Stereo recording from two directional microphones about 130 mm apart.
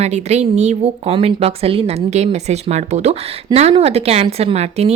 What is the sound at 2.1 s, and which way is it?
A woman's voice, 60° right (ahead or behind).